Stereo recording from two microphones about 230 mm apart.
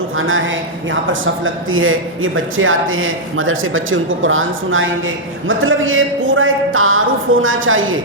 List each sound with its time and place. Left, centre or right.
0.2 s speech: right